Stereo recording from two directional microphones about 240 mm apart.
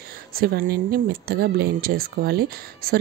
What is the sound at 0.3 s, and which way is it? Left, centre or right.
Speech, right.